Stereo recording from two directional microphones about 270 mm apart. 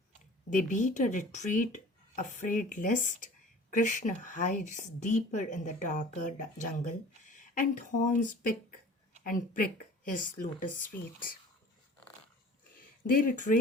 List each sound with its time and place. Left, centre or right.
0.5 s speech: left
13.1 s speech: left